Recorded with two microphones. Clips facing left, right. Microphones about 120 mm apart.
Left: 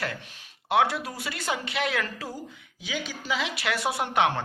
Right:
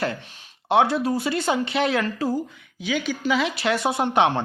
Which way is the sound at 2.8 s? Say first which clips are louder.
Right 9 dB; 60° right (ahead or behind).